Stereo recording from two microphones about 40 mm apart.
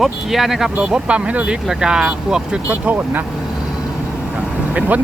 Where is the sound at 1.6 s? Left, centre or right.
Centre.